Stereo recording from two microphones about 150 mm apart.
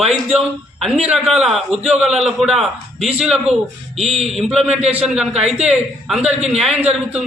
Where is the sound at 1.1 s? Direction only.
5° right (ahead or behind).